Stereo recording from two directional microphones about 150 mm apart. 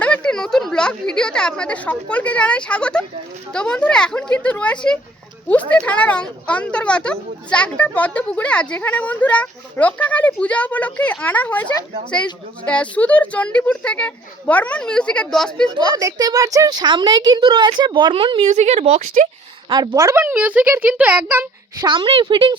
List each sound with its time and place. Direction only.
0.0 s speech: 5° left (ahead or behind)
16.0 s speech: 25° right (ahead or behind)
18.4 s speech: 50° right (ahead or behind)
19.7 s speech: 25° right (ahead or behind)
21.8 s a woman's voice: 35° right (ahead or behind)